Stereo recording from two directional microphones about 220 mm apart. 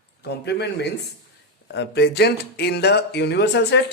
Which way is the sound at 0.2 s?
50° left (ahead or behind).